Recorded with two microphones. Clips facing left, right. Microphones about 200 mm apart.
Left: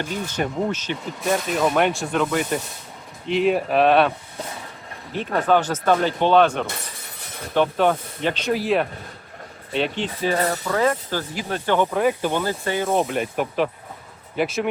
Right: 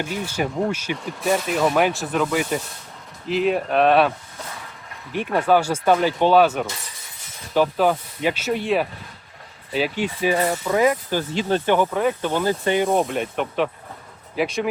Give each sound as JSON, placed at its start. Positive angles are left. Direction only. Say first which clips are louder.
{"t": 0.0, "sound": "speech", "louder": "right 1 dB", "side_deg": -10}
{"t": 5.1, "sound": "speech", "louder": "right 1 dB", "side_deg": -10}
{"t": 11.8, "sound": "speech", "louder": "left 1 dB", "side_deg": 0}
{"t": 12.3, "sound": "speech", "louder": "right 3 dB", "side_deg": -15}
{"t": 12.9, "sound": "speech", "louder": "right 1 dB", "side_deg": 0}